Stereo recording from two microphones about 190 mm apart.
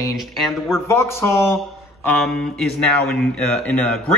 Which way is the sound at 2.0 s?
5° left (ahead or behind).